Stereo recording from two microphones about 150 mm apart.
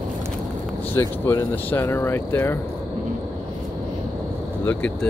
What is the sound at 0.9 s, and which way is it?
Speech, 15° left (ahead or behind).